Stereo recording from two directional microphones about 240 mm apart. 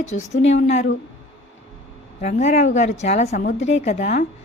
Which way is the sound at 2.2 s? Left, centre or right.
Left.